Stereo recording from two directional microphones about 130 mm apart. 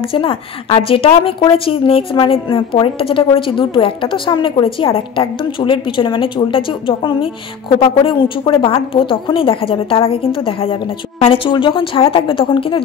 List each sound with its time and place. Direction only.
0.1 s a woman's voice: 45° left (ahead or behind)